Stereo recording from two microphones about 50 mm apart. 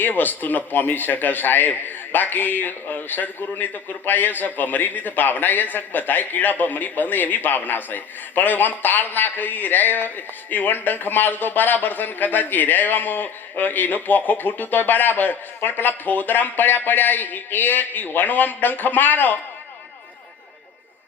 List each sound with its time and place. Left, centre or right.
0.0 s a man's voice: left